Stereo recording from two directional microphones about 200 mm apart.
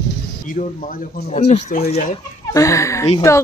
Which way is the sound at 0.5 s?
40° left (ahead or behind).